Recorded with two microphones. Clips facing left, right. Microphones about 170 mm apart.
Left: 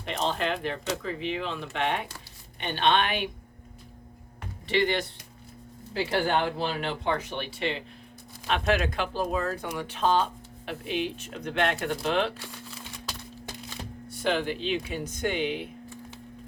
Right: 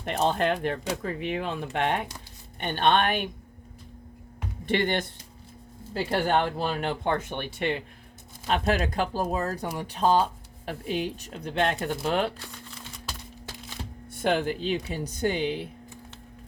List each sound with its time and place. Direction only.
0.0 s speech: 50° right (ahead or behind)
4.6 s speech: 50° right (ahead or behind)
8.4 s speech: 40° right (ahead or behind)
14.1 s speech: 50° right (ahead or behind)